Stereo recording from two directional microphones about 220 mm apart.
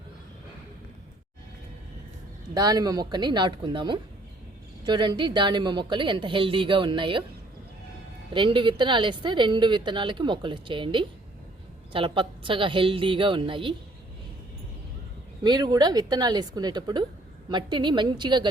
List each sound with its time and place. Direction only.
2.6 s a woman's voice: 15° right (ahead or behind)
8.3 s a woman's voice: 20° right (ahead or behind)
15.4 s a woman's voice: 20° right (ahead or behind)